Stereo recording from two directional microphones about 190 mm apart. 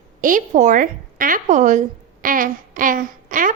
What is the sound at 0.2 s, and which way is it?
A woman's voice, 45° right (ahead or behind).